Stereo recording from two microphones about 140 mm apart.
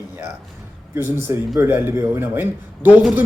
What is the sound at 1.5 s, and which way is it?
Speech, 15° right (ahead or behind).